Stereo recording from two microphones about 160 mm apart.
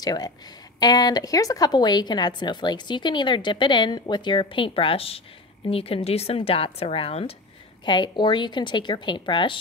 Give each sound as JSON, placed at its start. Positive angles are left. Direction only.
{"t": 0.0, "sound": "a woman's voice", "side_deg": 25}